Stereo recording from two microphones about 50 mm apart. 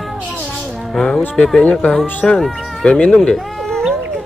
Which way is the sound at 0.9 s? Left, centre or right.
Centre.